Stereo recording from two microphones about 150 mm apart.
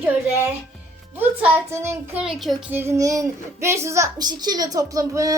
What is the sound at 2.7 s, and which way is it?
A child's voice, 15° right (ahead or behind).